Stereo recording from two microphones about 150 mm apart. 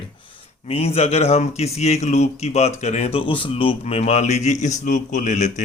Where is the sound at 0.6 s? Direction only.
40° left (ahead or behind).